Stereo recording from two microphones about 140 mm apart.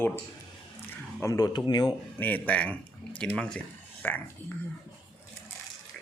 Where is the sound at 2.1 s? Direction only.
10° left (ahead or behind).